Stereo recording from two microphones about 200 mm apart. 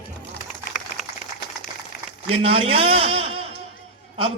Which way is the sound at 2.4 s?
30° right (ahead or behind).